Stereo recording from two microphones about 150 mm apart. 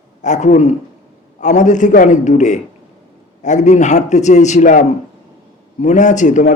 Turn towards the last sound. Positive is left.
turn(degrees=55)  # may be behind; listen again after turning